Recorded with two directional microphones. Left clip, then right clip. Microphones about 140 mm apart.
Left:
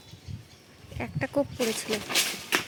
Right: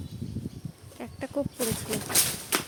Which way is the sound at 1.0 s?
15° left (ahead or behind).